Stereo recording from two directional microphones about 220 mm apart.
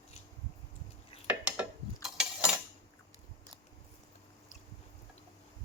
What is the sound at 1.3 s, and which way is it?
Cutlery, 5° right (ahead or behind).